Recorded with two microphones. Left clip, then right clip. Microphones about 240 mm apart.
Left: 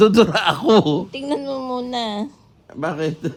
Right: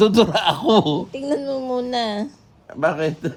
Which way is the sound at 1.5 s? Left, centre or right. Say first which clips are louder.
Right 2 dB; left.